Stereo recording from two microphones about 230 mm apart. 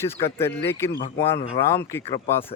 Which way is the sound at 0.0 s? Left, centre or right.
Centre.